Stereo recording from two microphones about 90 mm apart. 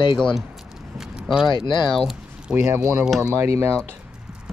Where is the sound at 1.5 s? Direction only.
60° left (ahead or behind).